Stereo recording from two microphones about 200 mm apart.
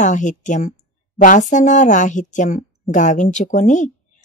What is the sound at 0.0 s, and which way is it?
A woman's voice, 40° left (ahead or behind).